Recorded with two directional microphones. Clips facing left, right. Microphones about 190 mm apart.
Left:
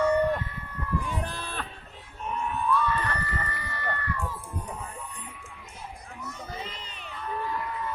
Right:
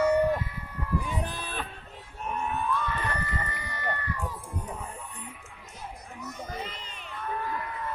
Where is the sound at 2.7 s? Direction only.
15° right (ahead or behind).